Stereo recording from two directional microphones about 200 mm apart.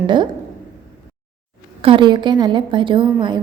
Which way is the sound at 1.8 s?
25° right (ahead or behind).